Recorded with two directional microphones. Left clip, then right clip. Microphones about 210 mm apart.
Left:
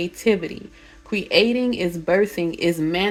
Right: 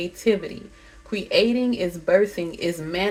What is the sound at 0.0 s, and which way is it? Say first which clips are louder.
Speech: left 2 dB; 50° left (ahead or behind).